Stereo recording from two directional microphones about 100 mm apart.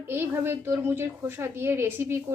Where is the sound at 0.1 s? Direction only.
25° right (ahead or behind).